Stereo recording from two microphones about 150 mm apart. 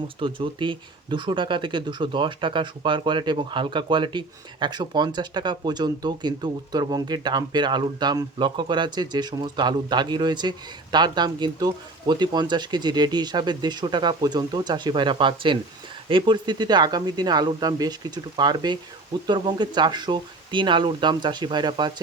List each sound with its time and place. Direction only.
0.2 s speech: 35° right (ahead or behind)